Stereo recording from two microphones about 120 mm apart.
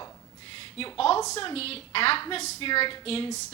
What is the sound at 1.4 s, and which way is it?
A woman's voice, 55° left (ahead or behind).